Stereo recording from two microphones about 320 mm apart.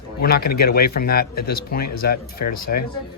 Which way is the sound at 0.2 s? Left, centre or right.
Left.